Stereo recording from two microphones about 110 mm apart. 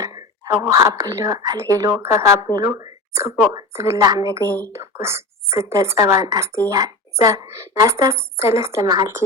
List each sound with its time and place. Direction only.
0.0 s a woman's voice: 35° right (ahead or behind)
2.6 s a sound: 30° right (ahead or behind)
3.5 s a woman's voice: 25° right (ahead or behind)